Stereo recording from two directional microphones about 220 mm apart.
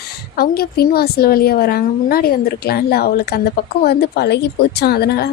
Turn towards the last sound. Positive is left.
turn(degrees=45)  # may be behind; listen again after turning